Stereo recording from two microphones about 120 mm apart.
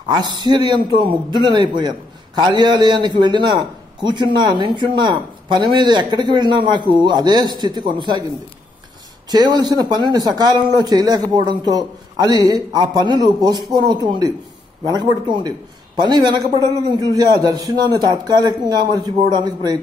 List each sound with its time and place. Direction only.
0.1 s speech: 40° right (ahead or behind)
9.3 s speech: 35° right (ahead or behind)